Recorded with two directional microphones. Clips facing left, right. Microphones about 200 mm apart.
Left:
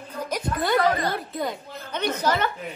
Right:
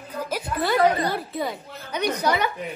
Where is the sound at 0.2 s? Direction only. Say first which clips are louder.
Even; 5° right (ahead or behind).